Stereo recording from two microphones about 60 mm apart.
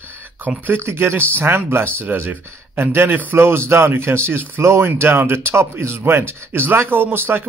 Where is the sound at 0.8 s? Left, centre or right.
Right.